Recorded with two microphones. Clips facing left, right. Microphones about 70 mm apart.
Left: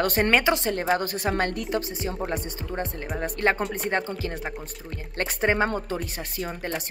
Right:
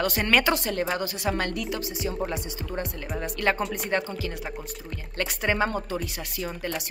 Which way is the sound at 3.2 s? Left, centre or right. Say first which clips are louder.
Left 2 dB; left.